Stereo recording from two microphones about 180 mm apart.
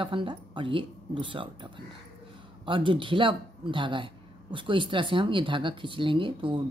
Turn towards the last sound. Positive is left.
turn(degrees=-30)  # may be behind; listen again after turning